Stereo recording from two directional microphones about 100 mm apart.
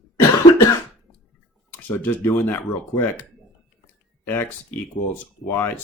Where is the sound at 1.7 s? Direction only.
20° left (ahead or behind).